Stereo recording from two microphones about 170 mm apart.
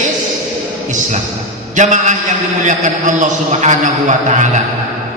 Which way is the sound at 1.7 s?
45° right (ahead or behind).